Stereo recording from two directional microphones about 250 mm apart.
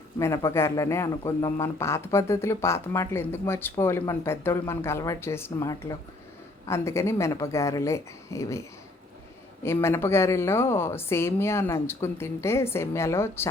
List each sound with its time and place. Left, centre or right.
0.2 s a man's voice: centre
9.6 s a man's voice: centre